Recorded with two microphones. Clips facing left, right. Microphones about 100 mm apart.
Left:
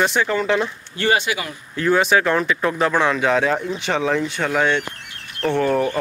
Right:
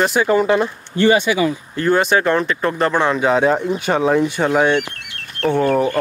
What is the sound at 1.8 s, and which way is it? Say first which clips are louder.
Speech: right 1 dB; centre (ahead or behind).